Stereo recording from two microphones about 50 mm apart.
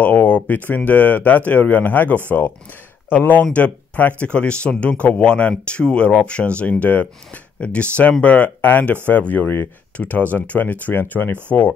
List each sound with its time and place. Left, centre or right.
0.0 s speech: left
9.3 s speech: left
9.9 s speech: left